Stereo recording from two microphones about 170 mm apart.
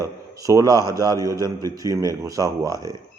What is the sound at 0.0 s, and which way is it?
A man's voice, 20° right (ahead or behind).